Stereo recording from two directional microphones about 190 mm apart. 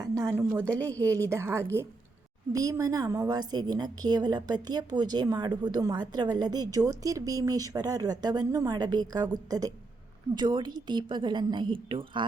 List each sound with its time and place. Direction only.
0.0 s a woman's voice: 15° right (ahead or behind)
0.8 s a woman's voice: 10° left (ahead or behind)
1.1 s a woman's voice: 15° right (ahead or behind)